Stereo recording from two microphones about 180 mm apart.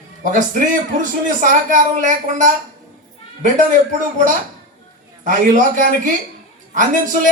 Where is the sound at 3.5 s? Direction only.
45° right (ahead or behind).